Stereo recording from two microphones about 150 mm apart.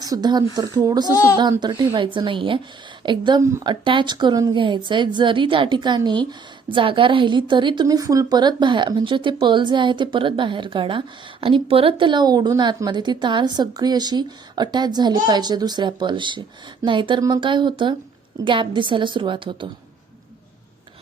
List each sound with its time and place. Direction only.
0.0 s speech: 25° right (ahead or behind)
1.1 s a child's voice: 20° left (ahead or behind)
1.4 s speech: 30° right (ahead or behind)